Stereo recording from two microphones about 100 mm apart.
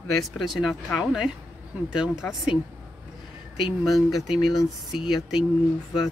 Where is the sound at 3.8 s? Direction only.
Centre (ahead or behind).